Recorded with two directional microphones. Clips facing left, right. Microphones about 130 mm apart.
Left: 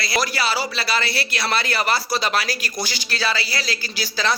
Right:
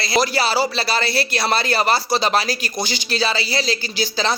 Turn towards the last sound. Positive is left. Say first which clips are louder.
# right 3 dB
turn(degrees=-25)  # may be behind; listen again after turning